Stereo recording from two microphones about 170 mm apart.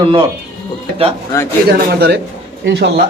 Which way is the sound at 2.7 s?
80° right.